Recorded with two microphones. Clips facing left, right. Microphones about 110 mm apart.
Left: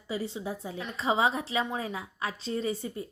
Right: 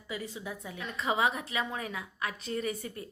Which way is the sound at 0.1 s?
30° left (ahead or behind).